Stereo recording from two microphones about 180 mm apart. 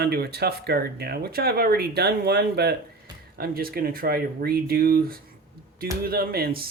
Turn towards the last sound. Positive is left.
turn(degrees=-55)  # may be behind; listen again after turning